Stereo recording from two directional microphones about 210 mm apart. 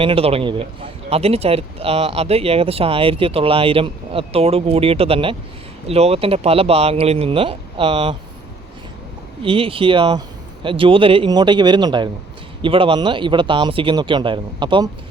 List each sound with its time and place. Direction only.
0.0 s speech: 25° right (ahead or behind)
9.4 s speech: 25° right (ahead or behind)